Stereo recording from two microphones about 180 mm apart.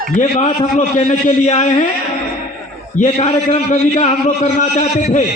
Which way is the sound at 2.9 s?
40° left (ahead or behind).